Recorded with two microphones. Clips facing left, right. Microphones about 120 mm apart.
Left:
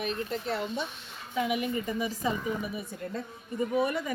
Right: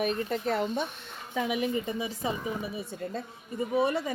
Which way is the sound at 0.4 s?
45° right (ahead or behind).